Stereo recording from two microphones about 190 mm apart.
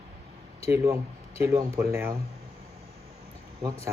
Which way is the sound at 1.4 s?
15° right (ahead or behind).